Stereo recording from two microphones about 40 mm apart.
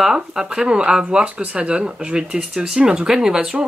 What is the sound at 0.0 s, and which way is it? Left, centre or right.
Speech, centre.